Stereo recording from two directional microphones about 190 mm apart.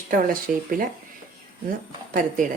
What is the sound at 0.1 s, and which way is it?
Speech, 45° right (ahead or behind).